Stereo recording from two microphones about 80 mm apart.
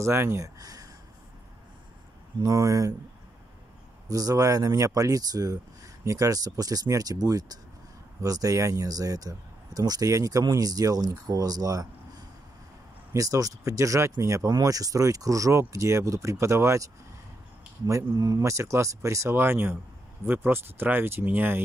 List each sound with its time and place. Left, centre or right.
0.0 s speech: right
0.6 s a sound: right
2.4 s speech: right
4.1 s speech: right